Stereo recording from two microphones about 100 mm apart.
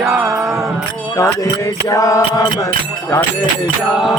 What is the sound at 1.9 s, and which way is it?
Music, 35° left (ahead or behind).